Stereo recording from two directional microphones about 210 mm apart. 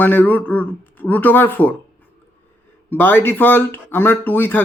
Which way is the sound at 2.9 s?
10° left (ahead or behind).